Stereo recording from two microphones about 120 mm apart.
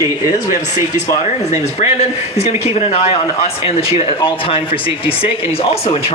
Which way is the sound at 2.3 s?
60° left (ahead or behind).